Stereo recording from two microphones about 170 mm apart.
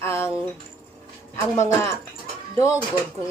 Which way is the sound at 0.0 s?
15° left (ahead or behind).